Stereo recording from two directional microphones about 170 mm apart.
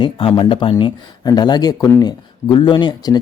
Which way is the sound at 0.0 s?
30° left (ahead or behind).